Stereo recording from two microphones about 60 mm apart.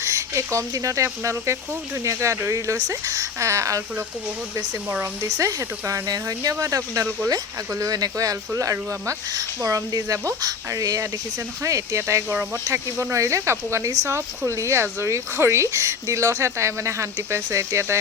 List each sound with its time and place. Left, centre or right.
0.0 s a sound: right
0.7 s speech: right
5.2 s speech: right
11.6 s speech: right